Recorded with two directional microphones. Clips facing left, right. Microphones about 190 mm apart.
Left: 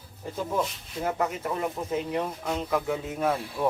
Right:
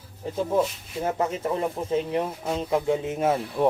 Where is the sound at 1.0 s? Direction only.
25° right (ahead or behind).